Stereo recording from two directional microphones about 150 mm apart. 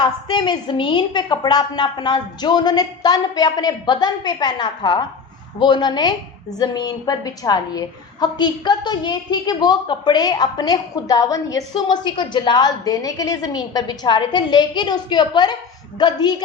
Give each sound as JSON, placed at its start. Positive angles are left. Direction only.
{"t": 0.0, "sound": "a woman's voice", "side_deg": 30}